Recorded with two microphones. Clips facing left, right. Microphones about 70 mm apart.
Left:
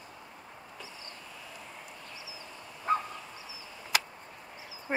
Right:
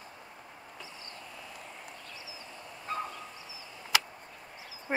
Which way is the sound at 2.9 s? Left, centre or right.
Left.